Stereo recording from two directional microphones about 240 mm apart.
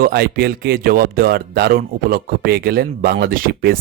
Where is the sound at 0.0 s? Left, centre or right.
Right.